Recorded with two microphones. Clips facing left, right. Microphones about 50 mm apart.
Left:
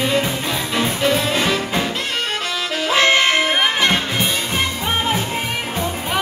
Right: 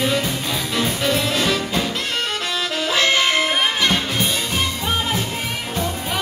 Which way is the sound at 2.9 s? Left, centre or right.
Left.